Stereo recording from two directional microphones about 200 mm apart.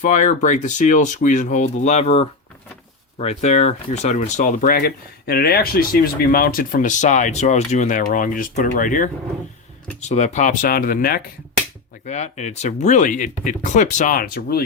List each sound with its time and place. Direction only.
0.0 s speech: 35° left (ahead or behind)
12.0 s speech: 35° left (ahead or behind)